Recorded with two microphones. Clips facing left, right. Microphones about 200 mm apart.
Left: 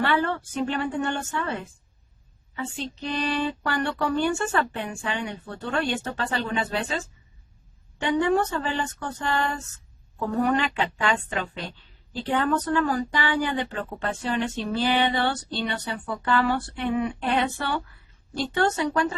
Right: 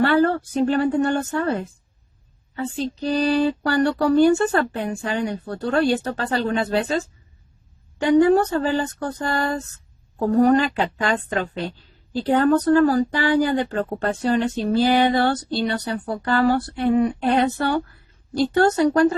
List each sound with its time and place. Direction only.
0.0 s speech: 40° right (ahead or behind)